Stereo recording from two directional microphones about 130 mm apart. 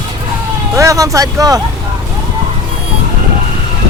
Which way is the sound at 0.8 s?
25° right (ahead or behind).